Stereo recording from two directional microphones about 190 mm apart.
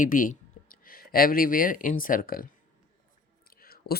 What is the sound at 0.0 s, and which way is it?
Speech, 45° left (ahead or behind).